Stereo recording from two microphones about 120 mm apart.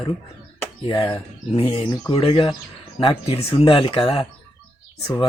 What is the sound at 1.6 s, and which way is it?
Speech, 55° left (ahead or behind).